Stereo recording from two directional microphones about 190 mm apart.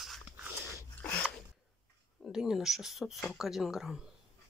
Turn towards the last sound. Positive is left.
turn(degrees=0)  # may be behind; listen again after turning